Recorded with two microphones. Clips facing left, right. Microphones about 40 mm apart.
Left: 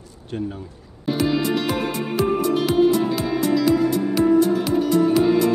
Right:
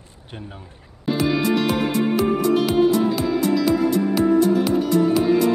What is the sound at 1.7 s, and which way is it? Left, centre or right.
Music, centre.